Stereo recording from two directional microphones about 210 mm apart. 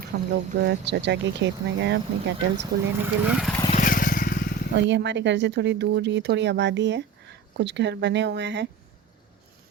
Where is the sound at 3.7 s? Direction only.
40° left (ahead or behind).